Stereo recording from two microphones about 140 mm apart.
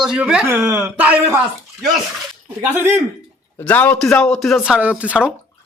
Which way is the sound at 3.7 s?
10° left (ahead or behind).